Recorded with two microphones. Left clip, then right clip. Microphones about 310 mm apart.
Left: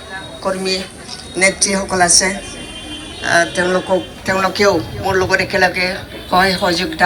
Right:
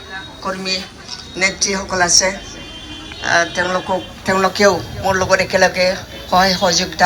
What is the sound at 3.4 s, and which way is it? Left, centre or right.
Speech, centre.